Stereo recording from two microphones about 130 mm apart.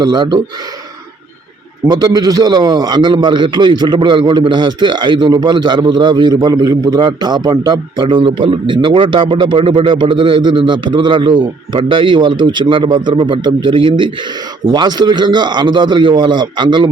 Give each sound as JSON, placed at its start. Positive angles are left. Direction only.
{"t": 0.0, "sound": "a man's voice", "side_deg": -35}
{"t": 1.9, "sound": "a man's voice", "side_deg": -30}